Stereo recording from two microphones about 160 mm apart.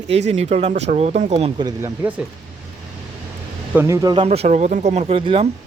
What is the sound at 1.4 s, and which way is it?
Speech, 30° right (ahead or behind).